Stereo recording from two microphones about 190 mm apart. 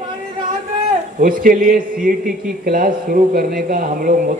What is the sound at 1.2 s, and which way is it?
A man's voice, 50° right (ahead or behind).